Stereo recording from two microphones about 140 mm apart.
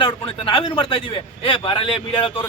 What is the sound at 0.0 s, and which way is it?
A man's voice, 40° left (ahead or behind).